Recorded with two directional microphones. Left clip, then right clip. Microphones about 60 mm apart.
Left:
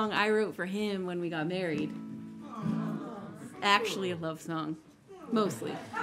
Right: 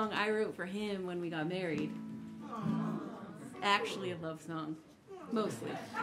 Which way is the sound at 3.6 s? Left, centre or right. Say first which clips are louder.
Left 5 dB; left.